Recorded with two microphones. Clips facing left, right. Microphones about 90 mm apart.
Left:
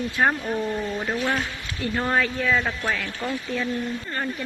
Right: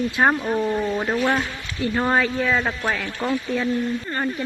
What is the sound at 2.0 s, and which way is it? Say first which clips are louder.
Speech: right 2 dB; 20° right (ahead or behind).